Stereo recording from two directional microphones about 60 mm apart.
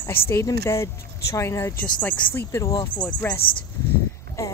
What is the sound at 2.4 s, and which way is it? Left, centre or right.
Speech, left.